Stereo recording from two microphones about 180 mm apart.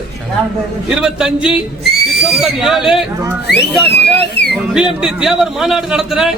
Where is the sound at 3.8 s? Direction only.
65° left (ahead or behind).